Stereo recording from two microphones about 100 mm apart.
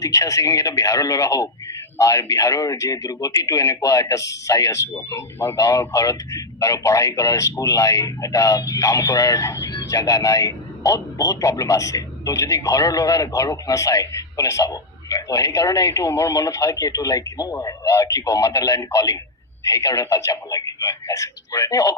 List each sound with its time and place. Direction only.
0.0 s speech: 35° left (ahead or behind)